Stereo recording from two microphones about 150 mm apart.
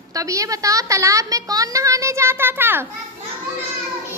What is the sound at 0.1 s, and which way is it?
A woman's voice, 20° right (ahead or behind).